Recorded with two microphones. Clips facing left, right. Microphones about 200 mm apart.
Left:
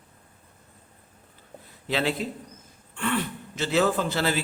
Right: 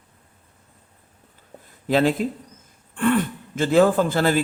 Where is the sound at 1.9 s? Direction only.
45° right (ahead or behind).